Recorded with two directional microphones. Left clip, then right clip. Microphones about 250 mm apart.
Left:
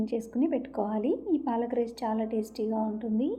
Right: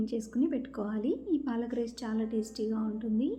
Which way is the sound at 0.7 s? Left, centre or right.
Left.